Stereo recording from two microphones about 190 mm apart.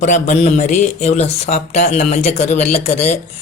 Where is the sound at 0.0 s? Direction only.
40° left (ahead or behind).